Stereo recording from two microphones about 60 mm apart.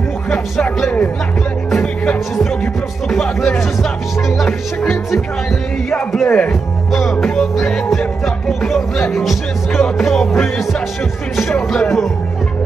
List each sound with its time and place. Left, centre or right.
1.7 s music: centre
3.1 s speech: centre
6.2 s speech: left
6.9 s speech: centre
8.5 s music: centre
9.1 s speech: centre